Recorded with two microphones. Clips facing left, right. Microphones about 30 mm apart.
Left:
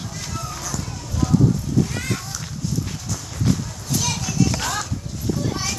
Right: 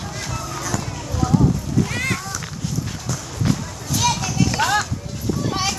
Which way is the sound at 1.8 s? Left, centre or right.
Right.